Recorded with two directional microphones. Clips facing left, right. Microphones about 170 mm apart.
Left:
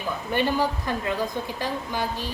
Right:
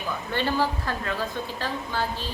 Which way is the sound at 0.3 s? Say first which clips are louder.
Left 2 dB; 15° left (ahead or behind).